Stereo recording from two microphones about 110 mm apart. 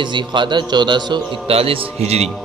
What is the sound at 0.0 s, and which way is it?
Speech, 45° right (ahead or behind).